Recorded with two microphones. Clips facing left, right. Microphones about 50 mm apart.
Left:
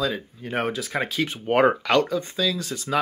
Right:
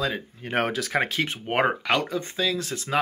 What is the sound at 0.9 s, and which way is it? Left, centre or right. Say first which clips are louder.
Speech: right 2 dB; right.